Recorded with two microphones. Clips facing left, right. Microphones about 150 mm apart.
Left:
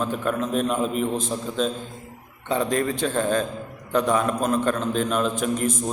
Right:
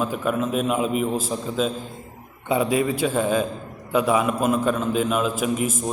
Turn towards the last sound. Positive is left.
turn(degrees=-5)  # may be behind; listen again after turning